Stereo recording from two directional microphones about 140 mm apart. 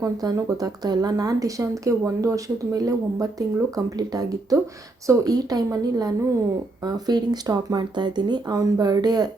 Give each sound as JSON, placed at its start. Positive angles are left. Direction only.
{"t": 0.0, "sound": "speech", "side_deg": -25}